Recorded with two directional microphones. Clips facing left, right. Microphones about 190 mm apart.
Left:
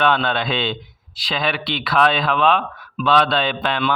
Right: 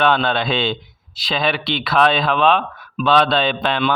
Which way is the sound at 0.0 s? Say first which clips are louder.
Right 2 dB; 30° right (ahead or behind).